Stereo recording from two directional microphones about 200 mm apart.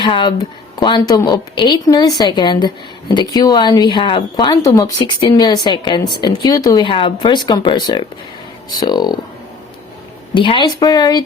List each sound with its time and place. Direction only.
0.0 s speech: 25° left (ahead or behind)
10.3 s speech: 25° left (ahead or behind)